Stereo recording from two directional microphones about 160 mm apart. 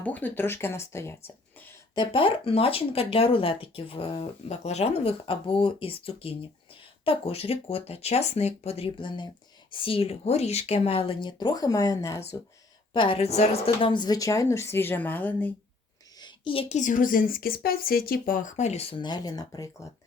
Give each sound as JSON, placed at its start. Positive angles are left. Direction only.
{"t": 0.0, "sound": "speech", "side_deg": 10}
{"t": 2.0, "sound": "speech", "side_deg": 35}
{"t": 12.9, "sound": "speech", "side_deg": 30}
{"t": 13.8, "sound": "speech", "side_deg": 30}
{"t": 16.2, "sound": "speech", "side_deg": 30}